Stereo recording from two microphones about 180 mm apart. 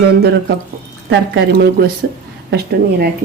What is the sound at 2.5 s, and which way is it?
Speech, 60° right (ahead or behind).